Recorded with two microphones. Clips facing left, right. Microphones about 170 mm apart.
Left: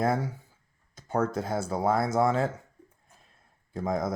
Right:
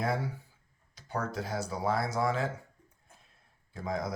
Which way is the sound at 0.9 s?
50° left (ahead or behind).